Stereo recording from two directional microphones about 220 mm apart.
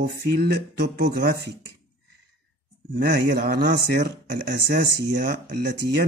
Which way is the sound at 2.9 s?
45° right (ahead or behind).